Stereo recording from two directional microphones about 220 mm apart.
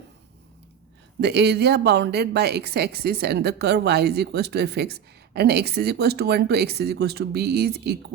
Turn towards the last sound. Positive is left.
turn(degrees=-45)  # may be behind; listen again after turning